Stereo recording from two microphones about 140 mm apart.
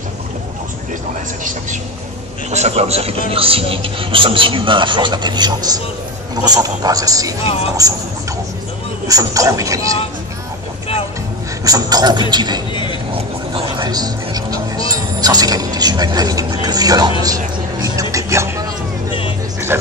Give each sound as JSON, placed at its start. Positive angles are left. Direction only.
{"t": 2.5, "sound": "a man's voice", "side_deg": -50}
{"t": 9.0, "sound": "speech", "side_deg": -25}
{"t": 11.6, "sound": "a man's voice", "side_deg": -25}
{"t": 17.2, "sound": "music", "side_deg": -25}
{"t": 19.7, "sound": "speech", "side_deg": -15}